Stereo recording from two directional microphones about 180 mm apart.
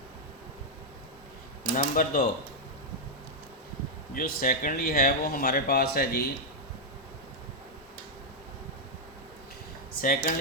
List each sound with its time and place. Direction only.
1.7 s speech: 50° left (ahead or behind)
4.1 s speech: 50° left (ahead or behind)
10.0 s speech: 50° left (ahead or behind)